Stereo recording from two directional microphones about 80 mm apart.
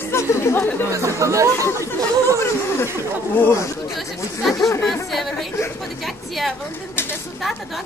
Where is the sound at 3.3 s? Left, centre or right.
Left.